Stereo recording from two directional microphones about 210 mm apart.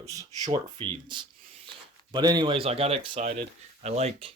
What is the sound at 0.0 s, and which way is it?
Speech, 15° right (ahead or behind).